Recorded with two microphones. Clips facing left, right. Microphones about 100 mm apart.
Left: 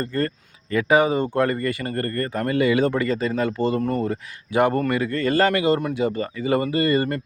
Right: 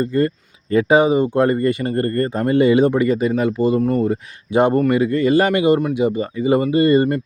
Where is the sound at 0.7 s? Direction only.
25° right (ahead or behind); by 4.1 s 5° right (ahead or behind).